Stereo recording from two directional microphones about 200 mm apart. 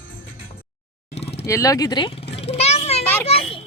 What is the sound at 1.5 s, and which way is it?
Vehicle, 15° left (ahead or behind).